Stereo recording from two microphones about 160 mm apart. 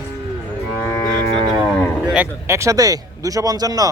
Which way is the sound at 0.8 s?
15° left (ahead or behind).